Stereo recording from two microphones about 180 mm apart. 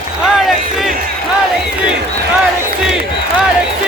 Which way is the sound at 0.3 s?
Centre (ahead or behind).